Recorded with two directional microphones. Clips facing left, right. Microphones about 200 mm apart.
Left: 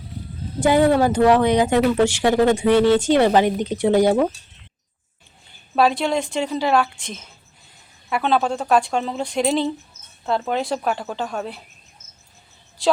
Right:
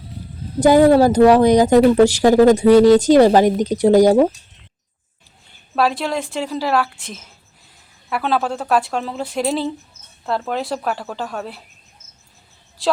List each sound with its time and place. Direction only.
0.6 s speech: 40° right (ahead or behind)
5.7 s speech: centre (ahead or behind)
12.8 s a woman's voice: centre (ahead or behind)